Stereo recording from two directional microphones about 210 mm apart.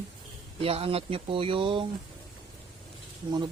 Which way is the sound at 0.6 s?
25° right (ahead or behind).